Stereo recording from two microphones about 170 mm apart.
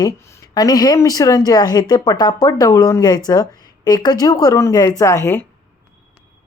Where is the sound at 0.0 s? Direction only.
20° left (ahead or behind).